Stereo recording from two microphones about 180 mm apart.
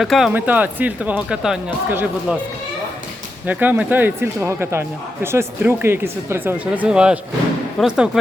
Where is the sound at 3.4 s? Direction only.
10° right (ahead or behind).